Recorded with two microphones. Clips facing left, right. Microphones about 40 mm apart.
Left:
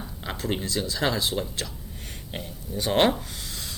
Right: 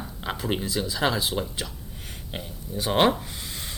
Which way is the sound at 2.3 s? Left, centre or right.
Centre.